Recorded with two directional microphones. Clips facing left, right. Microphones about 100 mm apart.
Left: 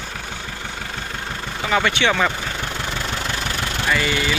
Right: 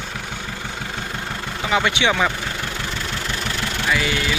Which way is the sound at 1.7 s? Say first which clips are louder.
Even; 10° right (ahead or behind).